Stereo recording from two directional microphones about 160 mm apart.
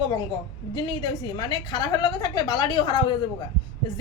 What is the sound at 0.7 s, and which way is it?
A woman's voice, 25° left (ahead or behind).